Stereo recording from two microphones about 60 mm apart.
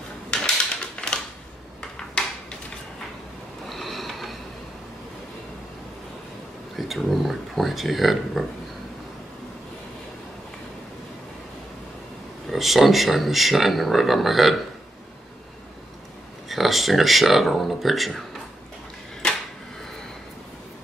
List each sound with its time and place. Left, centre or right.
1.0 s typewriter: centre
2.2 s a sound: centre
3.6 s sniff: centre
6.9 s speech: centre
12.4 s speech: centre
16.4 s speech: centre
19.2 s a sound: centre